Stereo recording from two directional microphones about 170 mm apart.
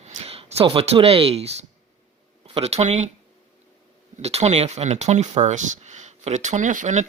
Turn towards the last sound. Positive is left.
turn(degrees=-45)  # may be behind; listen again after turning